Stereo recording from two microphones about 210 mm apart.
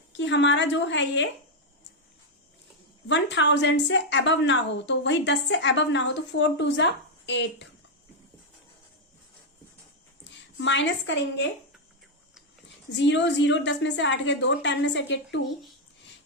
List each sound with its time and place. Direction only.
0.2 s a woman's voice: 60° left (ahead or behind)
3.1 s a woman's voice: 55° left (ahead or behind)
10.6 s a woman's voice: 60° left (ahead or behind)
13.0 s a woman's voice: 60° left (ahead or behind)